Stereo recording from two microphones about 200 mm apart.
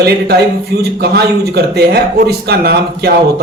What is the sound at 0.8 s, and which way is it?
A man's voice, 55° right (ahead or behind).